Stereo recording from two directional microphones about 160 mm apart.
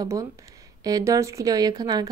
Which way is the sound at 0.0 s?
20° right (ahead or behind).